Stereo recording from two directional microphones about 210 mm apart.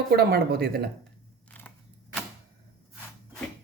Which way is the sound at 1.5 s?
5° left (ahead or behind).